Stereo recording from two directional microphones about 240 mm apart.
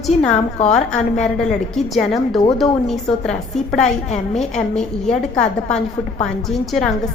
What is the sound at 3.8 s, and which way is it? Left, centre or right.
Speech, left.